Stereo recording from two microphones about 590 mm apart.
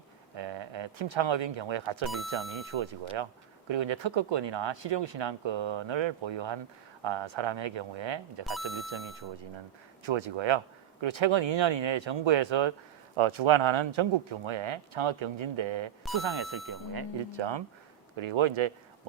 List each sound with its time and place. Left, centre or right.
0.3 s speech: right
2.0 s speech: centre
2.7 s speech: right
10.1 s speech: right
16.9 s speech: right